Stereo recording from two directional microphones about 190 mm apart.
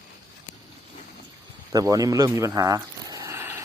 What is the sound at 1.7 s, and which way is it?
Speech, 20° right (ahead or behind).